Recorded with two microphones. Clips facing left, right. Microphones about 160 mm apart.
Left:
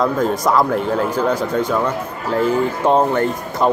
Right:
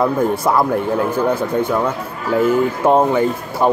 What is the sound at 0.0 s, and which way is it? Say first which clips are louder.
Speech: right 1 dB; 5° right (ahead or behind).